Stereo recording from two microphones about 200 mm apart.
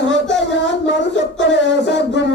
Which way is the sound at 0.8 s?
65° left (ahead or behind).